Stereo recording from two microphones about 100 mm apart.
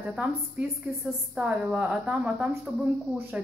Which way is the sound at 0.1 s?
10° right (ahead or behind).